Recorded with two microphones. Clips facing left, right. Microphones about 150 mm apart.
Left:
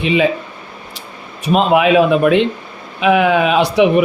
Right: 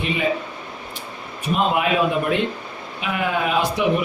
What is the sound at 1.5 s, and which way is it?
A man's voice, 85° left.